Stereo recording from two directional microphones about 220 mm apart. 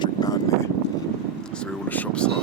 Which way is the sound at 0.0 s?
15° left (ahead or behind).